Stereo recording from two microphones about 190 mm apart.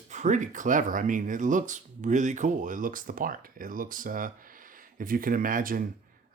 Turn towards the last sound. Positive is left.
turn(degrees=-45)  # may be behind; listen again after turning